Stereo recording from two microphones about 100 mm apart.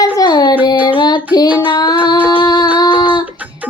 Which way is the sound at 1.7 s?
40° left (ahead or behind).